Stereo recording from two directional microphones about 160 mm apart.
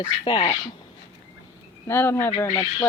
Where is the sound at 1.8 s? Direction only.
15° left (ahead or behind).